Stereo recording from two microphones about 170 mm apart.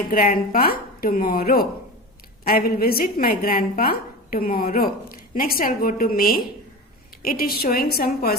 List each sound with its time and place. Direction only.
0.1 s a woman's voice: 60° left (ahead or behind)